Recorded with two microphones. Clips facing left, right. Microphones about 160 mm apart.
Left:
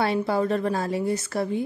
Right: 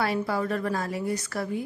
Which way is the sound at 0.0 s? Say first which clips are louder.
Left 4 dB; 25° left (ahead or behind).